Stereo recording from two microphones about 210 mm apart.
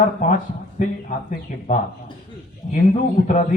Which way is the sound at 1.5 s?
40° left (ahead or behind).